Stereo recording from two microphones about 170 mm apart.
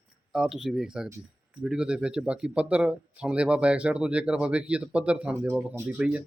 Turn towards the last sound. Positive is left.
turn(degrees=-10)  # may be behind; listen again after turning